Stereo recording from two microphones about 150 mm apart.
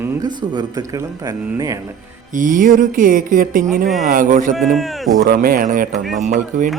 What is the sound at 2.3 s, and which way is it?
Music, 60° right (ahead or behind).